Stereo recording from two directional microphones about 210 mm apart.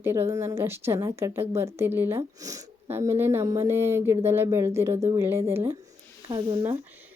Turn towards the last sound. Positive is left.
turn(degrees=-20)  # may be behind; listen again after turning